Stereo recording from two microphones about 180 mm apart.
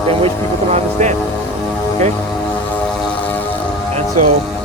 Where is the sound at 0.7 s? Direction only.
40° right (ahead or behind).